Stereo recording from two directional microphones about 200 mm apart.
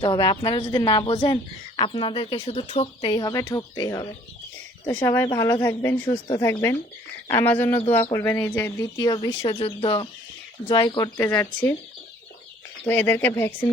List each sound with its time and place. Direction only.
0.0 s speech: 20° left (ahead or behind)
12.8 s speech: 10° left (ahead or behind)